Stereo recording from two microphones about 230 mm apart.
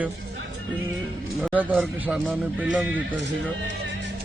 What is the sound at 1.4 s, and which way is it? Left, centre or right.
Speech, centre.